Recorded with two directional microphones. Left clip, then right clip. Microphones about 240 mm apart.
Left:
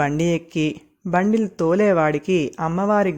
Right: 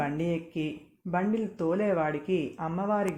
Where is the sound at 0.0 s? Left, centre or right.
Left.